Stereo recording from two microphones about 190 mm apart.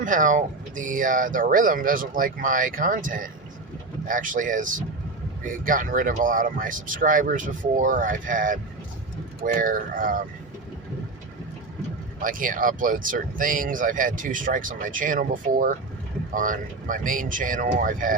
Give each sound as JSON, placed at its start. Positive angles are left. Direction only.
{"t": 0.0, "sound": "speech", "side_deg": -45}
{"t": 12.2, "sound": "speech", "side_deg": -45}